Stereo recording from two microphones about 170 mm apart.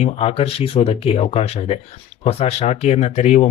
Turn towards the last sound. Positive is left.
turn(degrees=40)  # may be behind; listen again after turning